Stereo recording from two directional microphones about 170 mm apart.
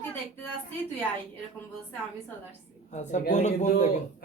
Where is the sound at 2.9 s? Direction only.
45° left (ahead or behind).